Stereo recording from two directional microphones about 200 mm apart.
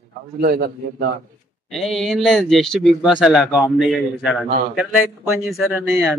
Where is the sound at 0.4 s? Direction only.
50° right (ahead or behind).